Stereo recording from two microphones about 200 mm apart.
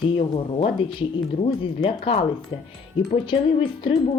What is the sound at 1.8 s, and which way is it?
Speech, 30° left (ahead or behind).